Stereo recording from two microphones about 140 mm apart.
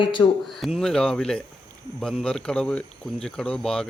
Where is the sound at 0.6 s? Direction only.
Centre (ahead or behind).